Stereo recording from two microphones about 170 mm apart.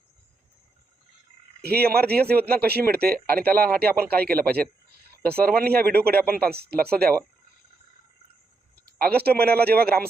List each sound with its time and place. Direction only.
1.6 s speech: 65° right (ahead or behind)
9.1 s speech: 65° right (ahead or behind)